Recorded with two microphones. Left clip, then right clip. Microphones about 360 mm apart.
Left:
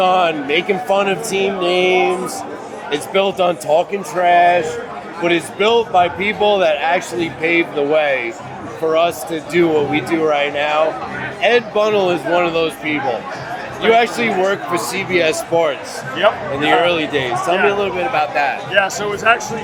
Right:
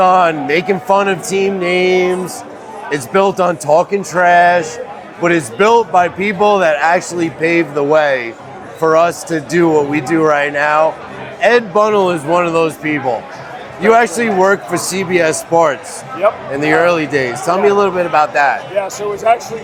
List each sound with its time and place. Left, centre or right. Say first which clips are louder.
0.0 s speech: right 4 dB; right
1.6 s music: even; right
3.1 s speech: right 3 dB; right
18.9 s speech: right 2 dB; centre